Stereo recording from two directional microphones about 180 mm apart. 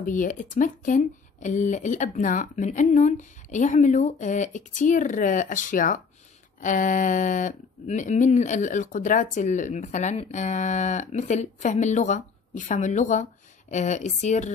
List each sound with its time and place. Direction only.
0.0 s speech: 45° left (ahead or behind)